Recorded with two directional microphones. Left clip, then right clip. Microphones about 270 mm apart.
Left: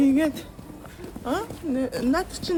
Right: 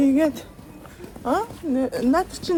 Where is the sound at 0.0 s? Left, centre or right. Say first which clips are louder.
Right 2 dB; centre.